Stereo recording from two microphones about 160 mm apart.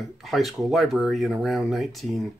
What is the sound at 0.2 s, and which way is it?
Speech, centre (ahead or behind).